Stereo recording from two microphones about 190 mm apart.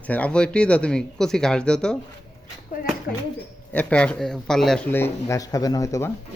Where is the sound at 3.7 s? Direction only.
5° left (ahead or behind).